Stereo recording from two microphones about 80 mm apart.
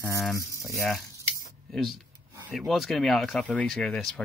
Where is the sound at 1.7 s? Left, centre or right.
Centre.